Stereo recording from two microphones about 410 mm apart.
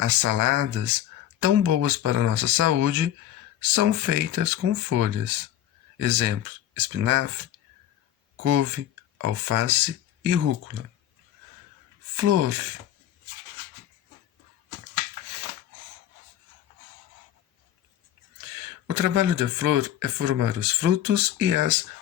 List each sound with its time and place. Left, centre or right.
0.0 s speech: right
9.2 s speech: right
12.1 s speech: right
18.9 s speech: right